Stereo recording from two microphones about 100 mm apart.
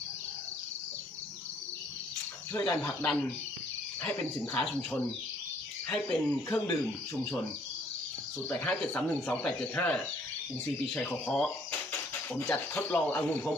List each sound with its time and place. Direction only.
3.0 s speech: 10° left (ahead or behind)
5.9 s speech: 10° left (ahead or behind)
8.4 s speech: 10° left (ahead or behind)
12.5 s speech: 15° left (ahead or behind)